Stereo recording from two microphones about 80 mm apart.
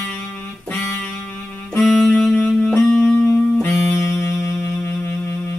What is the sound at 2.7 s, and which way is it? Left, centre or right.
Music, centre.